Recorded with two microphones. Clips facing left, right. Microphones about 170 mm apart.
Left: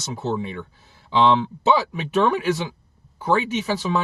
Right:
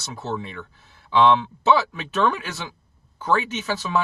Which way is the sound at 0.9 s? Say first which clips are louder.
Right 1 dB; 15° left (ahead or behind).